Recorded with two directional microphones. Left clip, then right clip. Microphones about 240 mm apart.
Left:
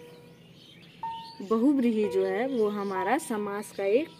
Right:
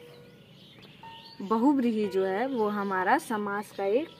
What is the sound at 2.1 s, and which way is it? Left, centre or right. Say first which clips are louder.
Speech: left 1 dB; centre.